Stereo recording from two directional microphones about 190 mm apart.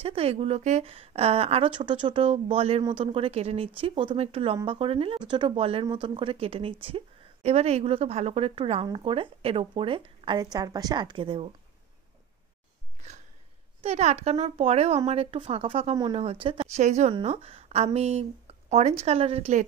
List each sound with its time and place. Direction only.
0.0 s a woman's voice: 30° right (ahead or behind)
13.7 s a woman's voice: 35° right (ahead or behind)